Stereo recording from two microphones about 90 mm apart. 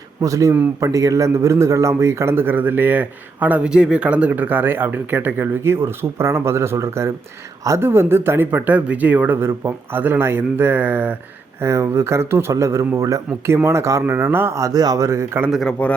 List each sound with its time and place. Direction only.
0.2 s a man's voice: 40° right (ahead or behind); by 11.2 s 20° right (ahead or behind)
11.6 s a man's voice: 30° right (ahead or behind)
15.4 s a man's voice: centre (ahead or behind)